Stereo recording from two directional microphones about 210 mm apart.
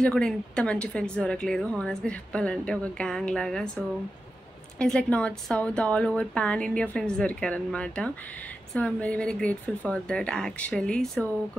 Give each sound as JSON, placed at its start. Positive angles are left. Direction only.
{"t": 0.0, "sound": "a woman's voice", "side_deg": 5}
{"t": 4.7, "sound": "a woman's voice", "side_deg": 5}